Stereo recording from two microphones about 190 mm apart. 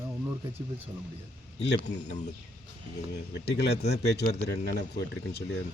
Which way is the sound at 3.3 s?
65° left (ahead or behind).